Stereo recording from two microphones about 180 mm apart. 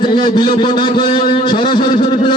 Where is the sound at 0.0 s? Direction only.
25° left (ahead or behind).